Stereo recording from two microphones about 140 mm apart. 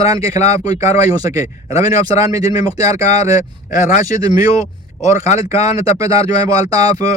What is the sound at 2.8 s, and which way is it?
Speech, 50° left (ahead or behind).